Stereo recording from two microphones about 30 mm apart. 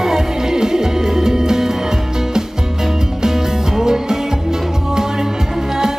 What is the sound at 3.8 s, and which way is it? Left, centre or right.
Music, centre.